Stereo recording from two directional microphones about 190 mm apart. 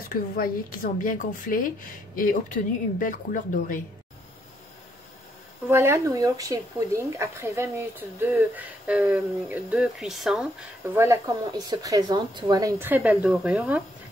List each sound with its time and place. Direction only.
0.1 s speech: 45° left (ahead or behind)
5.7 s speech: 15° right (ahead or behind)
10.9 s speech: 15° right (ahead or behind)